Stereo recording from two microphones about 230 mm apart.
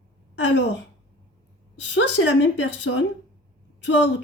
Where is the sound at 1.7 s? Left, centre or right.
Left.